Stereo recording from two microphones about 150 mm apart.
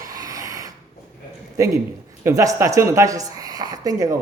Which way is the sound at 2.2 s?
20° right (ahead or behind).